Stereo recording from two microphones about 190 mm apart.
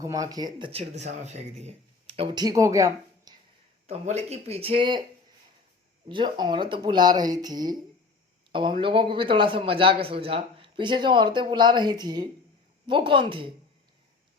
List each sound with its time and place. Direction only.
0.0 s a man's voice: 15° right (ahead or behind)
3.8 s speech: 35° right (ahead or behind)
6.1 s a man's voice: 25° right (ahead or behind)